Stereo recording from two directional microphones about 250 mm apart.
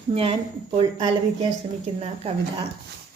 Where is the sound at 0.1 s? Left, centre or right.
Right.